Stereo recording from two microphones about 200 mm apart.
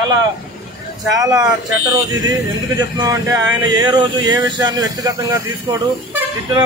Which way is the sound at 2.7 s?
20° right (ahead or behind).